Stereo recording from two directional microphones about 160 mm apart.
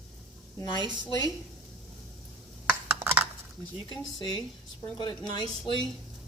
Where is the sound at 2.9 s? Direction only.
10° right (ahead or behind).